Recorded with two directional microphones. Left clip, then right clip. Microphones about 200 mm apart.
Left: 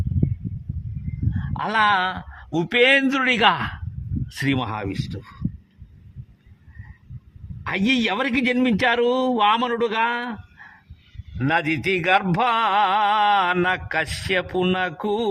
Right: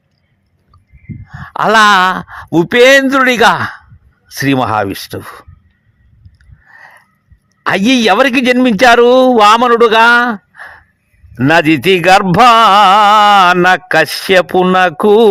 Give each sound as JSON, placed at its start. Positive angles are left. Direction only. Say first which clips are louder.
{"t": 1.3, "sound": "a man's voice", "louder": "right 15 dB", "side_deg": -35}
{"t": 4.5, "sound": "a man's voice", "louder": "right 14 dB", "side_deg": -40}
{"t": 7.6, "sound": "a man's voice", "louder": "right 11 dB", "side_deg": -40}